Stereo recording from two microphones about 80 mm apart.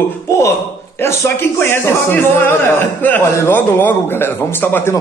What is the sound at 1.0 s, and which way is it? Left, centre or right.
Speech, left.